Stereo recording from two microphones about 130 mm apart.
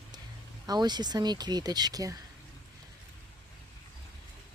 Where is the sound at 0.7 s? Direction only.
35° right (ahead or behind).